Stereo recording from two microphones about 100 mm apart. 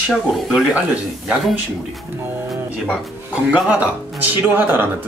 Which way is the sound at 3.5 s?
15° right (ahead or behind).